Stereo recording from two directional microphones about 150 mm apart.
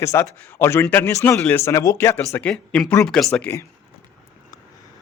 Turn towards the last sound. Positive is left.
turn(degrees=15)  # may be behind; listen again after turning